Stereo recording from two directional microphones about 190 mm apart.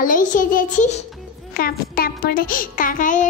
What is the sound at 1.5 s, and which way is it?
A child's voice, 50° left (ahead or behind).